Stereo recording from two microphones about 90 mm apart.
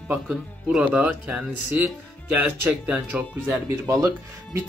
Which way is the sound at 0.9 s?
15° right (ahead or behind).